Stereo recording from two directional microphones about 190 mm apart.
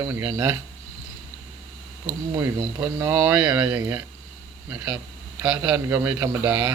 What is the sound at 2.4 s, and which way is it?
Speech, 15° right (ahead or behind).